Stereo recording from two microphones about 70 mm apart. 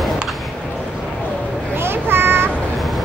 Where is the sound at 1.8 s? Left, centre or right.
Right.